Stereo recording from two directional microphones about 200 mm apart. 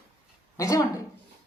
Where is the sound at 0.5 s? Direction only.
15° left (ahead or behind).